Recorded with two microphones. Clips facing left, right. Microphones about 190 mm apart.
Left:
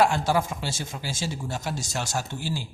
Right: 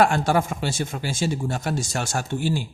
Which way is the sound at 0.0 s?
55° right (ahead or behind).